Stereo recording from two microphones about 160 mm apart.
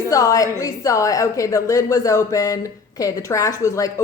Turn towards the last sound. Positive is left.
turn(degrees=20)  # may be behind; listen again after turning